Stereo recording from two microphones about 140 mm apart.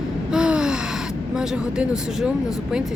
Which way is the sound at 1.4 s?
5° right (ahead or behind).